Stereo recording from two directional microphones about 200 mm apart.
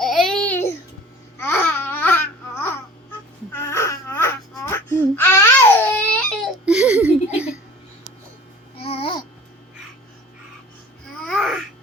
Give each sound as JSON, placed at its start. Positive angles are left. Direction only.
{"t": 0.0, "sound": "baby cry", "side_deg": 0}
{"t": 1.4, "sound": "babbling", "side_deg": 10}
{"t": 3.5, "sound": "baby cry", "side_deg": 15}
{"t": 6.7, "sound": "a sound", "side_deg": -5}
{"t": 8.8, "sound": "babbling", "side_deg": 30}
{"t": 11.3, "sound": "babbling", "side_deg": 0}